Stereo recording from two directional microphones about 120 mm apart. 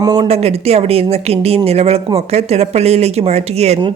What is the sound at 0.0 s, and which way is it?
Speech, 35° right (ahead or behind).